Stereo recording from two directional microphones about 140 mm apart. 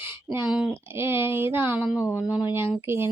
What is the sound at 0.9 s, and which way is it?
Speech, 15° right (ahead or behind).